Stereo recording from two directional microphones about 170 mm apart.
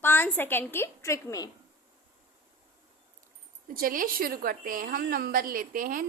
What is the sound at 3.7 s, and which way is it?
A woman's voice, 55° right (ahead or behind).